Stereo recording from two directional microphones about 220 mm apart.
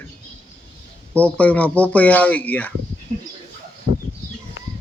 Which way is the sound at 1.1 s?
5° left (ahead or behind).